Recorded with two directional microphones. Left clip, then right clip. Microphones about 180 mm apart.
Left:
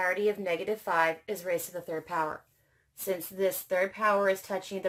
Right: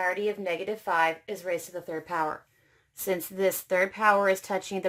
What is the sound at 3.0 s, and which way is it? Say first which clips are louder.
Speech: right 3 dB; 40° right (ahead or behind).